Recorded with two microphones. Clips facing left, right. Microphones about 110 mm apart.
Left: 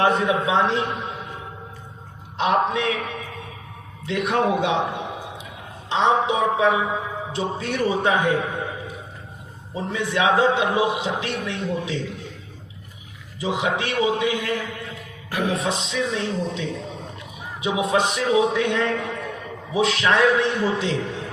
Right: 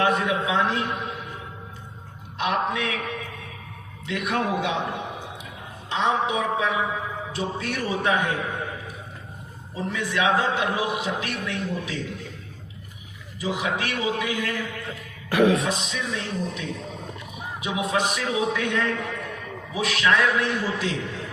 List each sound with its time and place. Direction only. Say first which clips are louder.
0.0 s a sound: left 3 dB; 30° left (ahead or behind)
0.4 s a man's voice: left 3 dB; 25° left (ahead or behind)
2.4 s a man's voice: left 4 dB; 25° left (ahead or behind)
4.0 s a man's voice: left 5 dB; 25° left (ahead or behind)
5.9 s a man's voice: left 4 dB; 25° left (ahead or behind)
9.7 s a man's voice: left 3 dB; 20° left (ahead or behind)
13.4 s a man's voice: left 3 dB; 25° left (ahead or behind)
15.3 s music: right 5 dB; 90° right
15.6 s a man's voice: left 3 dB; 25° left (ahead or behind)